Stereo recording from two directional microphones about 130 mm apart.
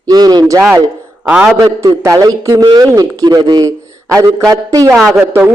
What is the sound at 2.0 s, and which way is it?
A man's voice, 25° right (ahead or behind).